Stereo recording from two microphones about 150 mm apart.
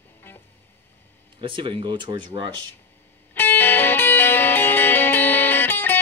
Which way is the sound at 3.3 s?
15° left (ahead or behind).